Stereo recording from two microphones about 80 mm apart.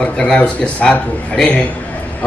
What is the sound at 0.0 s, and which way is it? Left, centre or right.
A man's voice, centre.